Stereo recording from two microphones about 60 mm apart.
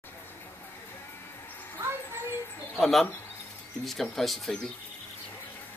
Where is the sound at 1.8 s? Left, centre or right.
Right.